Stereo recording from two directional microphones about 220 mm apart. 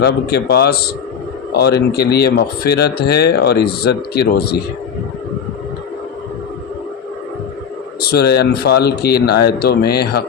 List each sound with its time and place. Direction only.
0.0 s speech: 45° left (ahead or behind)
8.1 s speech: 45° left (ahead or behind)